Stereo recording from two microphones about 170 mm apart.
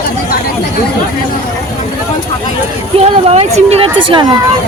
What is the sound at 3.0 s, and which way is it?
Speech, 35° right (ahead or behind).